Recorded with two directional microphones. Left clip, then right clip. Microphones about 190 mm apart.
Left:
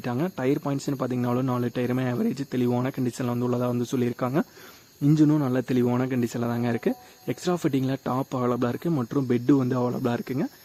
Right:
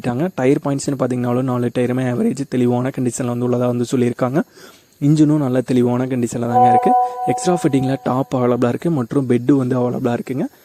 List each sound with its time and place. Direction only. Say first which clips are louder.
0.0 s speech: right 9 dB; 35° right (ahead or behind)